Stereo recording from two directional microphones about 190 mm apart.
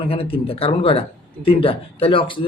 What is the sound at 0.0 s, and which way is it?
A man's voice, 30° left (ahead or behind).